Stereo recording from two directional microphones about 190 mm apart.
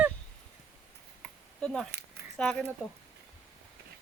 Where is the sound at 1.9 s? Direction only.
60° right (ahead or behind).